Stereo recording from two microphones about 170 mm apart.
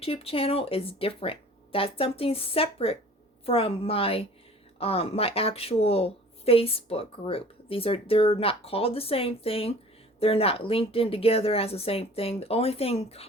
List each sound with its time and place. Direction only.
0.0 s a woman's voice: 35° left (ahead or behind)